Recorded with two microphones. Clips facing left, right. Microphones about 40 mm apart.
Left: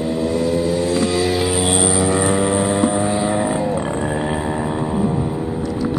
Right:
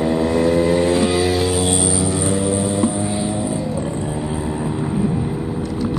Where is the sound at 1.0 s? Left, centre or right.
Centre.